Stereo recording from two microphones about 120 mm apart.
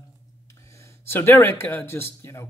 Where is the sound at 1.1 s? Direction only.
20° left (ahead or behind).